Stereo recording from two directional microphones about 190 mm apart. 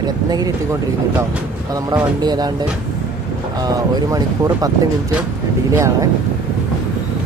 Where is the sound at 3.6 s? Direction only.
20° right (ahead or behind).